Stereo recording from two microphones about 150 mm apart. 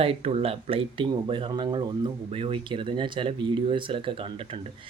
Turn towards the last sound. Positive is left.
turn(degrees=-40)  # may be behind; listen again after turning